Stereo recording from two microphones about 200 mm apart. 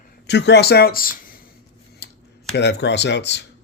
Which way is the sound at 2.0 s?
55° left (ahead or behind).